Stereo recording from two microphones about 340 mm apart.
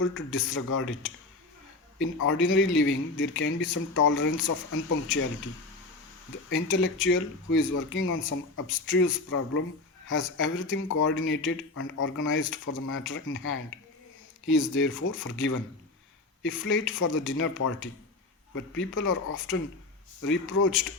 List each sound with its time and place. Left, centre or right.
0.0 s speech: left
6.5 s speech: left